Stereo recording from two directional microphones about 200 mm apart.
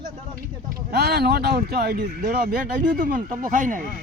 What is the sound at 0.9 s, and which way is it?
Speech, 55° right (ahead or behind).